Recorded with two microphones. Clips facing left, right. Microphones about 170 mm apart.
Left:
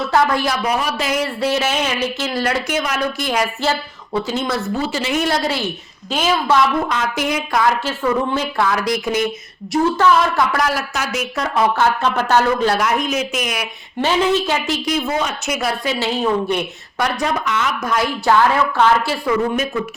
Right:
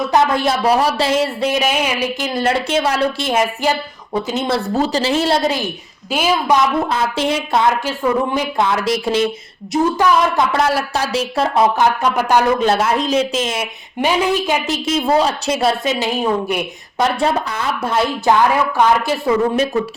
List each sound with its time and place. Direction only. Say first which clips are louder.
0.1 s a woman's voice: right 1 dB; 20° right (ahead or behind)
6.8 s speech: right 2 dB; 30° right (ahead or behind)
14.0 s speech: even; 15° right (ahead or behind)
17.0 s speech: right 3 dB; 30° right (ahead or behind)